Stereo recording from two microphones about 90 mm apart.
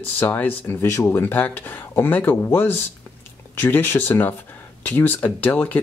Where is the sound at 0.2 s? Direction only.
20° left (ahead or behind).